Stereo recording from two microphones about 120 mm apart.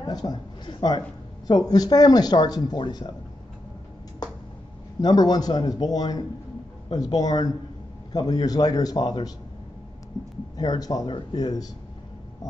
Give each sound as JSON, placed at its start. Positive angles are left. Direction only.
{"t": 0.0, "sound": "speech", "side_deg": 35}
{"t": 5.0, "sound": "speech", "side_deg": 35}
{"t": 10.6, "sound": "speech", "side_deg": 35}